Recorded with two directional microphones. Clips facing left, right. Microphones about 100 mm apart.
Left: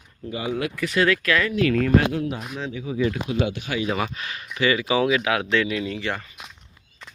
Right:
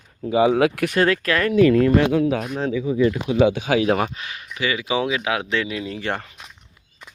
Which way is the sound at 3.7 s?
90° right.